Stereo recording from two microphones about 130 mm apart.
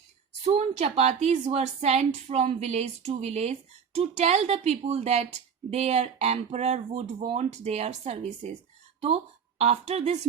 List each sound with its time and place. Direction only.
0.4 s a woman's voice: 55° right (ahead or behind)